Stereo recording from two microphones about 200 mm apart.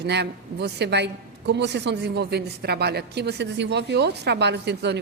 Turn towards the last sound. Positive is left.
turn(degrees=-60)  # may be behind; listen again after turning